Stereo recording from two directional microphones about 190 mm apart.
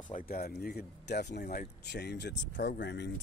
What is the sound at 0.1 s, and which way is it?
Speech, 50° left (ahead or behind).